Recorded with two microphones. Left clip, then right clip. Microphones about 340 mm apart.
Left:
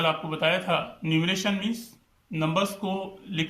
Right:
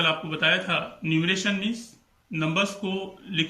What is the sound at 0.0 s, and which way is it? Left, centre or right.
Speech, centre.